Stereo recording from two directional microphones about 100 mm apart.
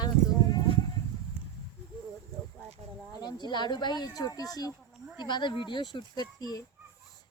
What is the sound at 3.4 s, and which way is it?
Speech, 45° left (ahead or behind).